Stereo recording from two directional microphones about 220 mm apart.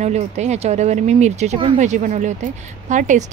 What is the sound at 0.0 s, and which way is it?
A woman's voice, 30° right (ahead or behind).